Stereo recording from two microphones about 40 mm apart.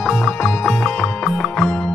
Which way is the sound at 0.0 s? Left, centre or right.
Centre.